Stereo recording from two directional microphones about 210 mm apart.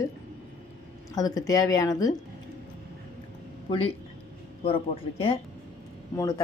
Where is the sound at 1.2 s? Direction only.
15° left (ahead or behind).